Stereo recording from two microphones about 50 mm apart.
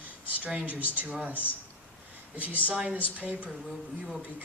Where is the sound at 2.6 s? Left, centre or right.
Right.